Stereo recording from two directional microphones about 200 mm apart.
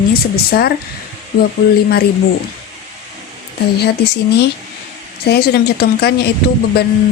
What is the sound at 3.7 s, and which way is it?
Speech, 55° left (ahead or behind).